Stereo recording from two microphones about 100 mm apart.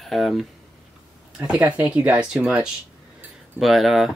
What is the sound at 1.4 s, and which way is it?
Speech, 10° right (ahead or behind).